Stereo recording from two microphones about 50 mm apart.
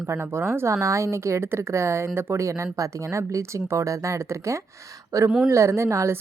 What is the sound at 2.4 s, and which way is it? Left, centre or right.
Speech, right.